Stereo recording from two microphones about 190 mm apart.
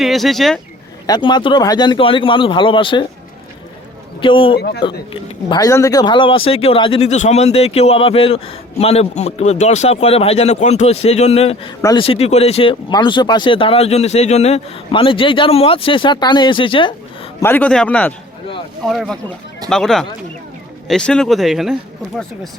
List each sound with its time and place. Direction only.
0.0 s speech: centre (ahead or behind)
1.0 s speech: 20° left (ahead or behind)
4.2 s speech: 30° left (ahead or behind)
4.5 s speech: 60° left (ahead or behind)
5.5 s speech: 20° left (ahead or behind)
11.8 s speech: 20° left (ahead or behind)
12.0 s speech: 30° left (ahead or behind)
17.4 s a man's voice: 10° left (ahead or behind)